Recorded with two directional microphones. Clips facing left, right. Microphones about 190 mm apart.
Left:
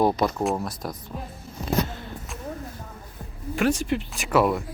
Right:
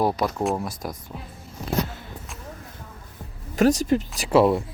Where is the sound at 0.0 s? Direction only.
5° right (ahead or behind).